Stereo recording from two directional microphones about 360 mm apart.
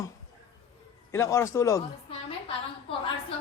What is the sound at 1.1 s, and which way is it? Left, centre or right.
Speech, centre.